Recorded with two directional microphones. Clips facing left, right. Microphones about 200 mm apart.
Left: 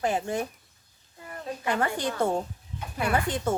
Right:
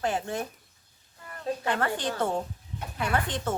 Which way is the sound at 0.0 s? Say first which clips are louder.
Left 2 dB; 10° left (ahead or behind).